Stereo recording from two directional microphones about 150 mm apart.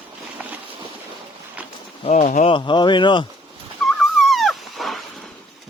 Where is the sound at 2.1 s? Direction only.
50° left (ahead or behind).